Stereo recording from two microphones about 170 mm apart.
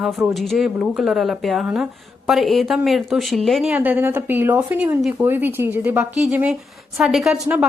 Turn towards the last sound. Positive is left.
turn(degrees=-5)  # may be behind; listen again after turning